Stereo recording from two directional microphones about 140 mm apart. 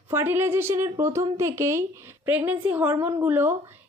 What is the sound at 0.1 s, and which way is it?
A woman's voice, 15° right (ahead or behind).